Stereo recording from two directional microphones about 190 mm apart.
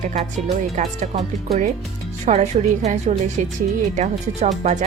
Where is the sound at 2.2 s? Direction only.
35° right (ahead or behind).